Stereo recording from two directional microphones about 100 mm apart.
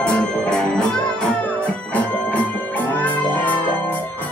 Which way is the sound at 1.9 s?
15° left (ahead or behind).